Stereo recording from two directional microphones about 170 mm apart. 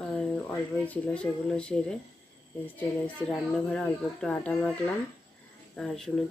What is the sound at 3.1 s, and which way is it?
Speech, 5° left (ahead or behind).